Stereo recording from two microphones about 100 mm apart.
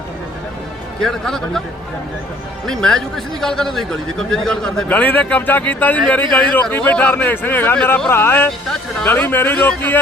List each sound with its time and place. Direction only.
1.0 s a man's voice: 5° left (ahead or behind)
2.6 s a man's voice: 5° left (ahead or behind)
4.9 s speech: 15° left (ahead or behind)